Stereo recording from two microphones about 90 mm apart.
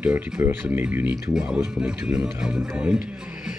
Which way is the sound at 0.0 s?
20° right (ahead or behind).